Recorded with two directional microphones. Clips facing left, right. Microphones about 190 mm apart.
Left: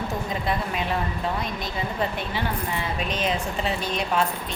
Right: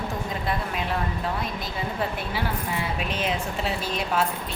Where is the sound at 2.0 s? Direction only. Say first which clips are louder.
Left 1 dB; 10° right (ahead or behind).